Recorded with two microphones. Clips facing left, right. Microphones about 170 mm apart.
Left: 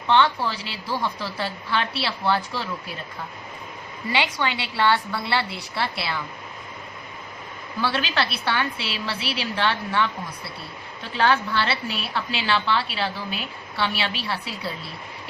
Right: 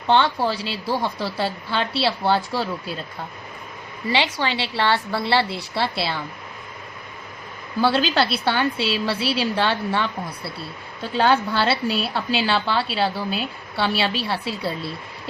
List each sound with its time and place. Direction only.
0.1 s a woman's voice: 35° right (ahead or behind)
4.1 s a woman's voice: 30° right (ahead or behind)
7.8 s a woman's voice: 35° right (ahead or behind)
11.2 s a woman's voice: 35° right (ahead or behind)